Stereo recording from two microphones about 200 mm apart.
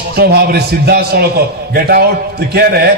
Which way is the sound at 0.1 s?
55° right (ahead or behind).